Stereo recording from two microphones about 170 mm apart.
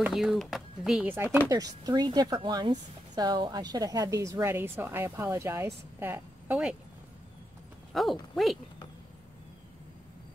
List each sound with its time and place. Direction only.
0.0 s speech: centre (ahead or behind)
1.5 s a woman's voice: 25° right (ahead or behind); by 6.8 s 10° right (ahead or behind)
7.9 s speech: centre (ahead or behind)